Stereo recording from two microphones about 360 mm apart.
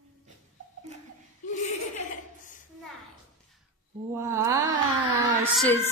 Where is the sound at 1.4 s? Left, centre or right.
Centre.